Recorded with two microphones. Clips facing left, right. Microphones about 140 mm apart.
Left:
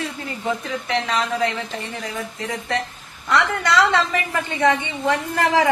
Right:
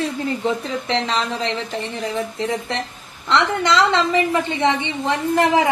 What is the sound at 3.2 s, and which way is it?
A woman's voice, 25° right (ahead or behind).